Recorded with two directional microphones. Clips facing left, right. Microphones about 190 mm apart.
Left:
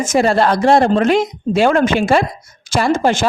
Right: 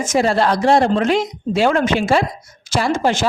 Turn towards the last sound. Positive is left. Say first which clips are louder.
# left 3 dB
turn(degrees=50)  # may be behind; listen again after turning